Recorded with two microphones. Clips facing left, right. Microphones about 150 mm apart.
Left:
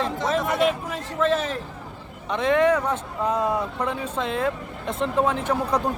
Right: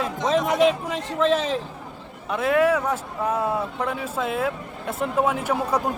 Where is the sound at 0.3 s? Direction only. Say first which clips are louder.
Right 4 dB; 20° right (ahead or behind).